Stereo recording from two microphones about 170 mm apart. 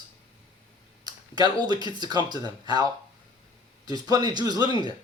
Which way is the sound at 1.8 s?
25° right (ahead or behind).